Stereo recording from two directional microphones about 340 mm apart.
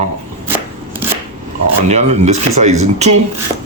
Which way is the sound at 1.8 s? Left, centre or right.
Centre.